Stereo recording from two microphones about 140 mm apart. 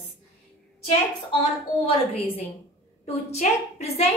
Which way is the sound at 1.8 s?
45° left (ahead or behind).